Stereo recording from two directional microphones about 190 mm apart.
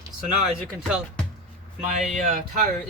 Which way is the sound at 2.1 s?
40° right (ahead or behind).